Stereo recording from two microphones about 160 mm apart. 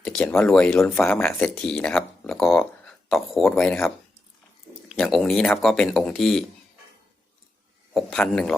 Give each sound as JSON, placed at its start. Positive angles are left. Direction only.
{"t": 0.0, "sound": "speech", "side_deg": 5}
{"t": 7.9, "sound": "speech", "side_deg": 0}